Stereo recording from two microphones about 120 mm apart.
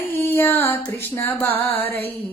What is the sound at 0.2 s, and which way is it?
Female singing, 20° left (ahead or behind).